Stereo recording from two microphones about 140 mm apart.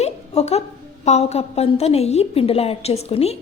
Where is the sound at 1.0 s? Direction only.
50° left (ahead or behind).